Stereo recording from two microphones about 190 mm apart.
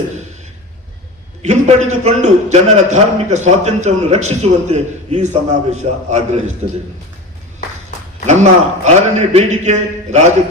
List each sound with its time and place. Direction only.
1.4 s a man's voice: 35° right (ahead or behind)
8.3 s a man's voice: 40° right (ahead or behind)